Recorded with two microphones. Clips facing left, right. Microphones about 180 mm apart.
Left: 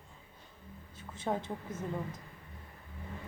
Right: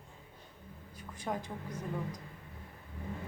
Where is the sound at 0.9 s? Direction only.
25° left (ahead or behind).